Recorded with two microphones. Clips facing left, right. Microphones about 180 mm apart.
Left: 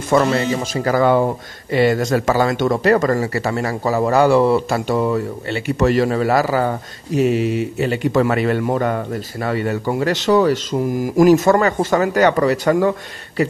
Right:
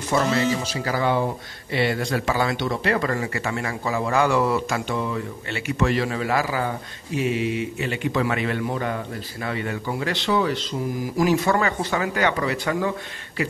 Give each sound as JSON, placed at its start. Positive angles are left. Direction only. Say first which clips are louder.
{"t": 0.1, "sound": "a man's voice", "louder": "left 5 dB", "side_deg": 55}